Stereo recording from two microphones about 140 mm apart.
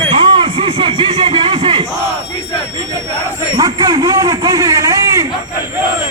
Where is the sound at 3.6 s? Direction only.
30° right (ahead or behind).